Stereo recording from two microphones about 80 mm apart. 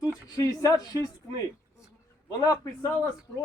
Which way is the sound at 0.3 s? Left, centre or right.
Left.